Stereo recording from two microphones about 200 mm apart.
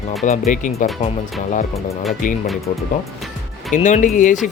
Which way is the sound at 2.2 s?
40° left (ahead or behind).